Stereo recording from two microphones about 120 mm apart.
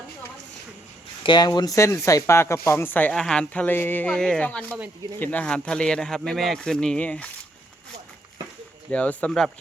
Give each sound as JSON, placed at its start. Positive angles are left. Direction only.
{"t": 1.2, "sound": "speech", "side_deg": 40}
{"t": 8.9, "sound": "speech", "side_deg": 10}